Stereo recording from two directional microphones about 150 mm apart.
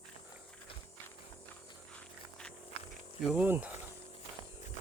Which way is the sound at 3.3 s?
10° right (ahead or behind).